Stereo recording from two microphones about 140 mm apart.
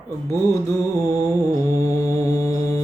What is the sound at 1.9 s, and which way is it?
Mantra, 25° left (ahead or behind).